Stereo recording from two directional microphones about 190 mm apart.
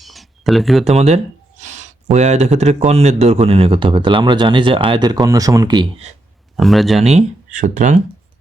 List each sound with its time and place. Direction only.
0.0 s a sound: centre (ahead or behind)
0.9 s a man's voice: 35° right (ahead or behind)
6.6 s speech: centre (ahead or behind)
7.1 s speech: 40° right (ahead or behind)